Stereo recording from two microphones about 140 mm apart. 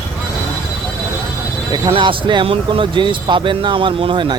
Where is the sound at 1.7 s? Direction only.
35° right (ahead or behind).